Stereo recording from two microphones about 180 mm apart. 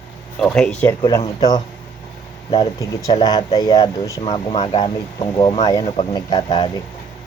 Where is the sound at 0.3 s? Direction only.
5° left (ahead or behind).